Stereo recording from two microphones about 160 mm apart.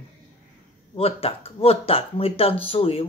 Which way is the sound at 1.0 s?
35° left (ahead or behind).